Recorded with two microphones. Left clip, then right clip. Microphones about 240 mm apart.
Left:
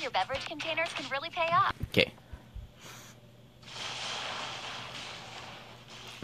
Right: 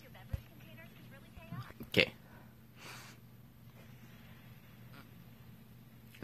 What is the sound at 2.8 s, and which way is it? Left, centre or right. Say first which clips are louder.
Snort: left 2 dB; centre.